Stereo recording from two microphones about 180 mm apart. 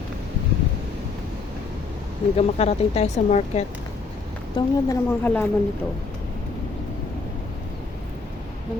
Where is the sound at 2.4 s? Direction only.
35° left (ahead or behind).